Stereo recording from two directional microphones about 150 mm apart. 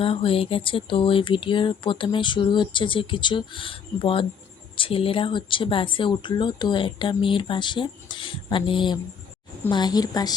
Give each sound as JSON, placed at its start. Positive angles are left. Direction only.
{"t": 0.0, "sound": "a woman's voice", "side_deg": 35}